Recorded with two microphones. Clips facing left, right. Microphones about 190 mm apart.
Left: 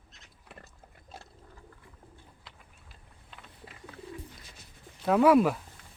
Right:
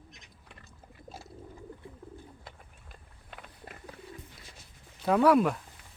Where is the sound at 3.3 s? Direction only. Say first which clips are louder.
Right 3 dB; 55° right (ahead or behind).